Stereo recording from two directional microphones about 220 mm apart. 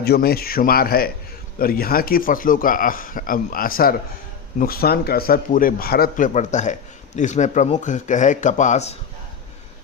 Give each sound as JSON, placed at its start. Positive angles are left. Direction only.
{"t": 0.0, "sound": "a man's voice", "side_deg": 45}